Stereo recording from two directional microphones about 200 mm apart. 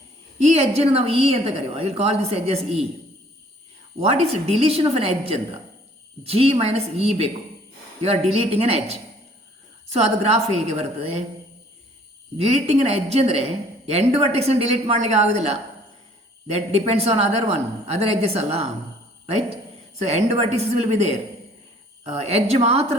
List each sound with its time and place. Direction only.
0.4 s a woman's voice: 30° right (ahead or behind)
4.0 s a woman's voice: 30° right (ahead or behind)
12.4 s a woman's voice: 35° right (ahead or behind)
20.0 s a woman's voice: 35° right (ahead or behind)